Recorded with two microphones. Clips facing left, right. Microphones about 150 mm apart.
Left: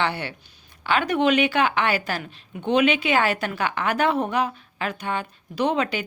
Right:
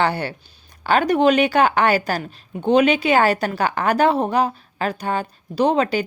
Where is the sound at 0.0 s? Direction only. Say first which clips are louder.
Right 5 dB; 40° right (ahead or behind).